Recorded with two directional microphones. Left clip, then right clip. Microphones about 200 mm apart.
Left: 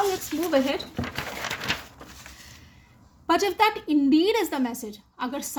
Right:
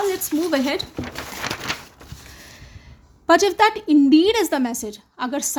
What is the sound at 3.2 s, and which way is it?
A woman's voice, 35° right (ahead or behind).